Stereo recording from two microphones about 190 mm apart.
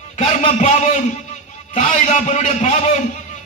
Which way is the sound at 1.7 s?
40° left (ahead or behind).